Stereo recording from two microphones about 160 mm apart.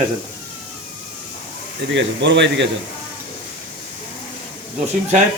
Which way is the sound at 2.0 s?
90° right.